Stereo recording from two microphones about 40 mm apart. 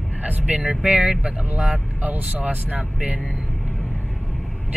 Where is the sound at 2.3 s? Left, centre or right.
Right.